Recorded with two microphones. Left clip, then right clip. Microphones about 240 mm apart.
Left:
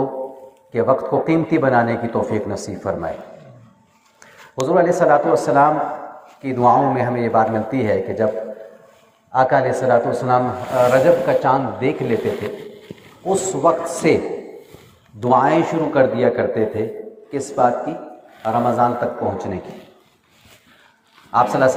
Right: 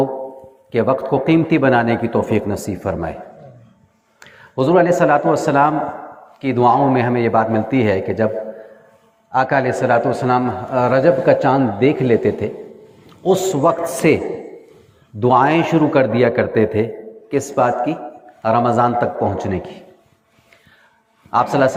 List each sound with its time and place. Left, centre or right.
0.7 s a man's voice: right
4.2 s a man's voice: right
9.3 s a man's voice: right
13.2 s a man's voice: right
15.2 s a man's voice: right
21.2 s a man's voice: right